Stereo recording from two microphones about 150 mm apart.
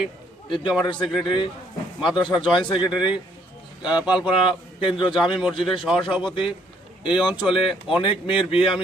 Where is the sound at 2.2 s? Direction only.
30° left (ahead or behind).